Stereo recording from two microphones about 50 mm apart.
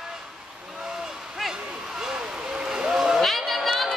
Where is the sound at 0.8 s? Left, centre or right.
Centre.